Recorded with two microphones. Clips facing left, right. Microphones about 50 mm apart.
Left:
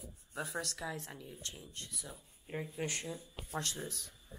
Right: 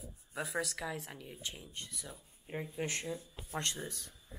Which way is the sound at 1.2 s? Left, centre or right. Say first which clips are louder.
Right 2 dB; right.